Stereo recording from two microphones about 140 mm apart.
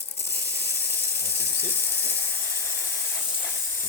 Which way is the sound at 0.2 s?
15° left (ahead or behind).